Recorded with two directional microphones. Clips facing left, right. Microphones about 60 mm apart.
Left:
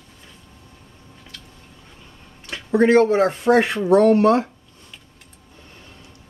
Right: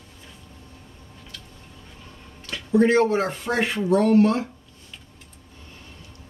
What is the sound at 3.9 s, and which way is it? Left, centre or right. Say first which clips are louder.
Speech: left 6 dB; left.